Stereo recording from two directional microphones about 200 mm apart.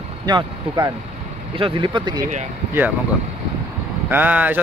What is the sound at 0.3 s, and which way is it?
Speech, 20° right (ahead or behind).